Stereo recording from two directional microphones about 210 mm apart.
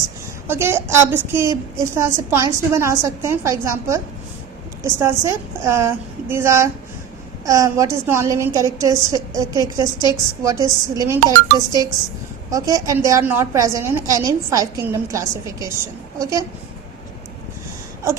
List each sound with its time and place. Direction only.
0.4 s a woman's voice: 10° right (ahead or behind)
12.5 s a woman's voice: 15° right (ahead or behind)